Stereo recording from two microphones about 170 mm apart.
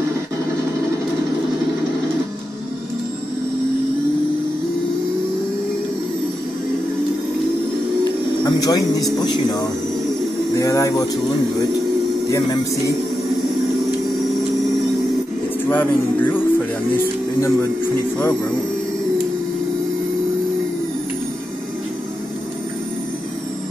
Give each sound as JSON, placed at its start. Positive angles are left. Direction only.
{"t": 8.5, "sound": "speech", "side_deg": 25}
{"t": 15.7, "sound": "speech", "side_deg": 10}